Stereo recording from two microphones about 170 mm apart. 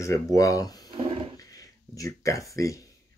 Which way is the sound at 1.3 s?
20° left (ahead or behind).